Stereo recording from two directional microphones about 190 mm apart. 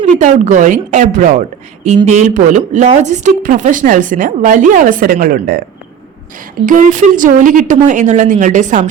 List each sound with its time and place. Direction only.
0.2 s a woman's voice: 40° right (ahead or behind)
6.7 s speech: 45° right (ahead or behind)